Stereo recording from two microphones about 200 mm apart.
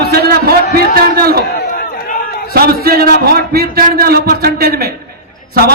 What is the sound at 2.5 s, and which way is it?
A man's voice, 50° right (ahead or behind).